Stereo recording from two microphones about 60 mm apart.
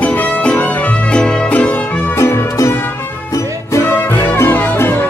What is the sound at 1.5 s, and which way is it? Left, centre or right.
Music, left.